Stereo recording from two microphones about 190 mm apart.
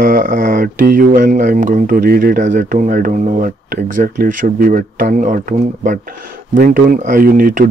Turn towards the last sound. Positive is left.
turn(degrees=-50)  # may be behind; listen again after turning